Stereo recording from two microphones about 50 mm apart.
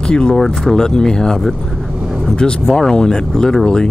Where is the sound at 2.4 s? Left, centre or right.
Centre.